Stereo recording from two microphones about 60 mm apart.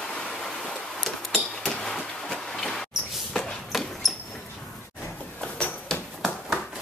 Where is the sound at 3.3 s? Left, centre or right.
Centre.